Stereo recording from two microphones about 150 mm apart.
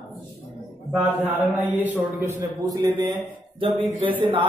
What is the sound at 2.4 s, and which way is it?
A man's voice, 30° right (ahead or behind).